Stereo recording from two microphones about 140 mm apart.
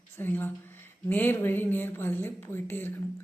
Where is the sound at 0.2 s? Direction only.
15° left (ahead or behind).